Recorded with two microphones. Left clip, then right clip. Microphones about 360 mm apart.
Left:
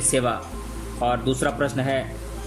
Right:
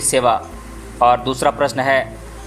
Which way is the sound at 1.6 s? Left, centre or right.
Centre.